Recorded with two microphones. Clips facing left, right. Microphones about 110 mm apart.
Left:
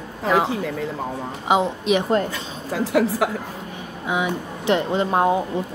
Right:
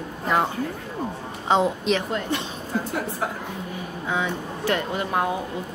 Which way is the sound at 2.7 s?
90° left.